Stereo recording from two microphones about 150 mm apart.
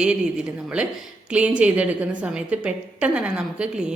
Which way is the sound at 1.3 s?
10° right (ahead or behind).